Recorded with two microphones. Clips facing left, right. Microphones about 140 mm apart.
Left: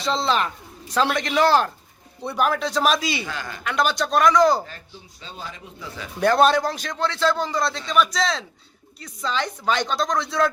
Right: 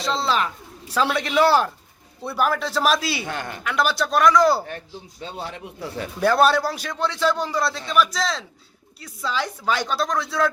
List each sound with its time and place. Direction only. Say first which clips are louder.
0.0 s a man's voice: left 1 dB; centre (ahead or behind)
5.2 s speech: right 5 dB; 70° right (ahead or behind)
6.1 s a man's voice: left 1 dB; 5° right (ahead or behind)